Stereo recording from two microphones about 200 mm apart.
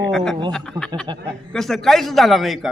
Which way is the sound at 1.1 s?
25° right (ahead or behind).